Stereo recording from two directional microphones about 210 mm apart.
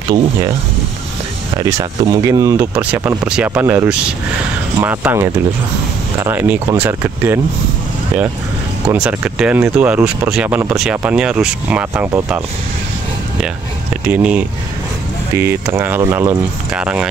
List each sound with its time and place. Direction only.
1.6 s speech: 15° right (ahead or behind)
8.8 s speech: 5° right (ahead or behind)
14.0 s speech: 5° right (ahead or behind)